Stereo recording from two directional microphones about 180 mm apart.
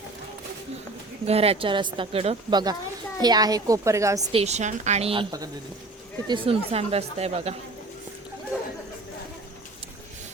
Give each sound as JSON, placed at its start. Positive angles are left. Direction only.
{"t": 1.3, "sound": "a woman's voice", "side_deg": -35}
{"t": 4.3, "sound": "speech", "side_deg": -35}
{"t": 6.2, "sound": "speech", "side_deg": -30}